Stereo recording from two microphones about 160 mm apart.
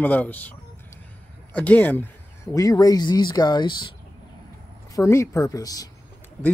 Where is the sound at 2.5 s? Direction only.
20° left (ahead or behind).